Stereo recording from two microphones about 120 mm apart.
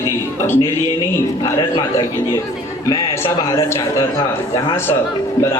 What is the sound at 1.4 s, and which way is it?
A man's voice, 40° left (ahead or behind).